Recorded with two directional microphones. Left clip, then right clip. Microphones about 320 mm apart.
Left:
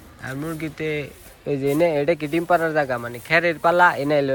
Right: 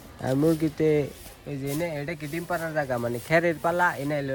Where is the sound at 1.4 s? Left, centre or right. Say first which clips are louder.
Left 11 dB; centre.